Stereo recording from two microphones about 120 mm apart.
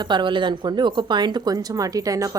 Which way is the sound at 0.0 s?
40° right (ahead or behind).